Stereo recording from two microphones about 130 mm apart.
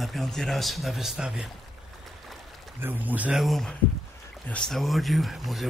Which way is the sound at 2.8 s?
15° right (ahead or behind).